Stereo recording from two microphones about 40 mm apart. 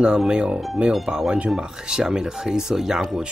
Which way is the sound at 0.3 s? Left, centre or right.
Right.